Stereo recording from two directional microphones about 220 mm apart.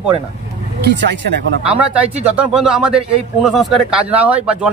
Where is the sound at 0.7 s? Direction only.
45° right (ahead or behind).